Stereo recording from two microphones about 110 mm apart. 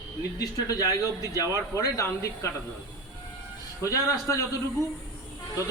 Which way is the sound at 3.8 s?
30° left (ahead or behind).